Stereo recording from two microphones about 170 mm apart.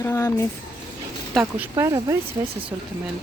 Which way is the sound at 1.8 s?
20° right (ahead or behind).